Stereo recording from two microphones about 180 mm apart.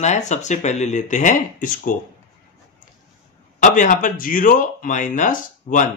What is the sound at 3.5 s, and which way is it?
Speech, 45° left (ahead or behind).